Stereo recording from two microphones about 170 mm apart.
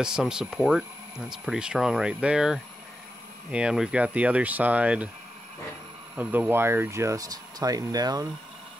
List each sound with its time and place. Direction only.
0.0 s speech: 5° right (ahead or behind)
6.1 s speech: 10° right (ahead or behind)